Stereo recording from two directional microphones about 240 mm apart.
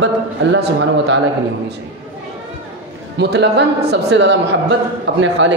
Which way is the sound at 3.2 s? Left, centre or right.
Right.